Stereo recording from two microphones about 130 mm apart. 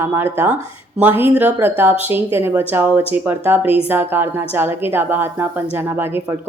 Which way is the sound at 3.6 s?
45° left (ahead or behind).